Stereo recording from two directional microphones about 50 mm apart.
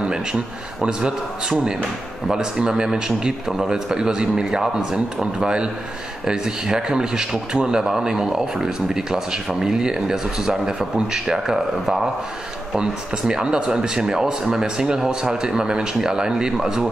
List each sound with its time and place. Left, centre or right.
0.0 s speech: centre